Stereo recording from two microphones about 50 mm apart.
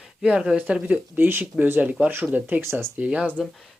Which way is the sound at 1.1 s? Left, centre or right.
Right.